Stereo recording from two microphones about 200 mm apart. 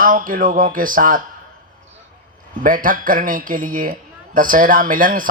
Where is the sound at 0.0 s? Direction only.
45° right (ahead or behind).